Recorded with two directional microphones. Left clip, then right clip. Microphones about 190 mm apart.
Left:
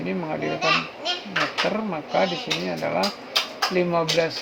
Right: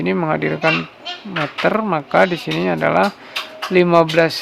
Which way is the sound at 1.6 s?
35° right (ahead or behind).